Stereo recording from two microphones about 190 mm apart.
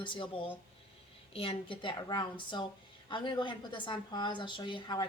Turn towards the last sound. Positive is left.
turn(degrees=25)  # may be behind; listen again after turning